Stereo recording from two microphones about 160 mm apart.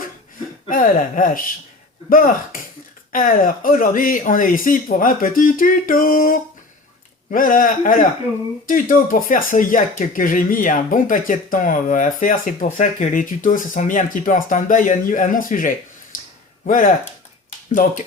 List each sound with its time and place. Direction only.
0.7 s speech: 55° left (ahead or behind)
16.1 s a sound: 60° left (ahead or behind)
16.6 s speech: 55° left (ahead or behind)